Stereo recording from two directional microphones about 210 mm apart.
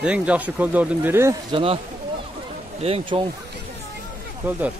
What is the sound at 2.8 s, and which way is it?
Speech, 30° right (ahead or behind).